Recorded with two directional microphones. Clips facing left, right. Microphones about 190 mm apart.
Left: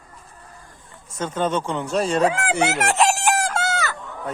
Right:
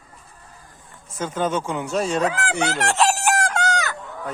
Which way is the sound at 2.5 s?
Centre (ahead or behind).